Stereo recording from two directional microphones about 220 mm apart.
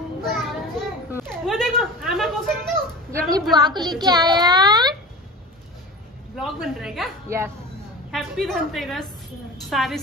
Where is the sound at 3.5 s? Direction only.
20° right (ahead or behind).